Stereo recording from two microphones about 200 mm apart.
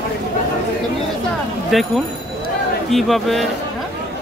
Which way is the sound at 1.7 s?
Centre (ahead or behind).